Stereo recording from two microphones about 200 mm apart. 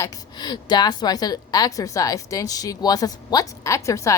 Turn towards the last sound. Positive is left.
turn(degrees=15)  # may be behind; listen again after turning